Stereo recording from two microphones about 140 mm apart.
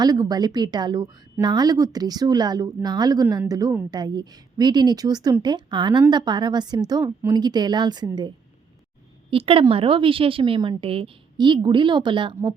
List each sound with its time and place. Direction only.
0.0 s a woman's voice: 25° right (ahead or behind)
9.3 s a woman's voice: 40° right (ahead or behind)